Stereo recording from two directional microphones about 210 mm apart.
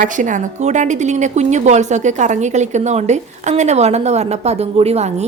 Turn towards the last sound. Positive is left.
turn(degrees=-30)  # may be behind; listen again after turning